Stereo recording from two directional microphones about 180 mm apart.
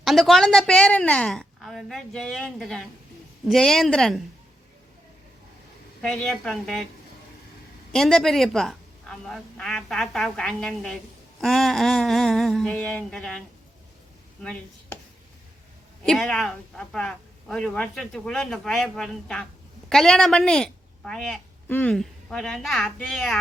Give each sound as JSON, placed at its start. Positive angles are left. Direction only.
{"t": 0.0, "sound": "speech", "side_deg": 0}
{"t": 6.0, "sound": "speech", "side_deg": 5}
{"t": 7.9, "sound": "speech", "side_deg": 0}
{"t": 16.0, "sound": "speech", "side_deg": 5}